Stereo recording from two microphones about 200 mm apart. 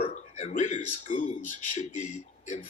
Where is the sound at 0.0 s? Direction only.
35° left (ahead or behind).